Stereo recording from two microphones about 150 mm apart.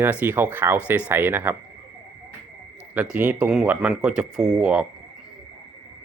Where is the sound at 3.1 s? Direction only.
10° right (ahead or behind).